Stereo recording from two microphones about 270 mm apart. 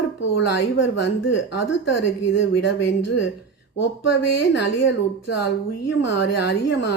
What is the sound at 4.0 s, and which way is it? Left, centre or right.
Speech, left.